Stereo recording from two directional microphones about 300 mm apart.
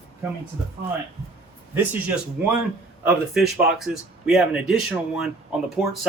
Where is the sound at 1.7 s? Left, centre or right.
Centre.